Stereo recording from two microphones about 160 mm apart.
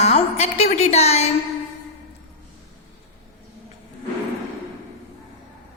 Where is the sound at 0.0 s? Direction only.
40° left (ahead or behind).